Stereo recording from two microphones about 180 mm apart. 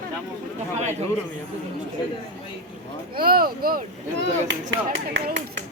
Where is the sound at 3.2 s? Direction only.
55° right (ahead or behind).